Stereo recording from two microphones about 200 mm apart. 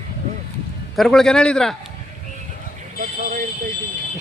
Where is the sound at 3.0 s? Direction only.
40° right (ahead or behind).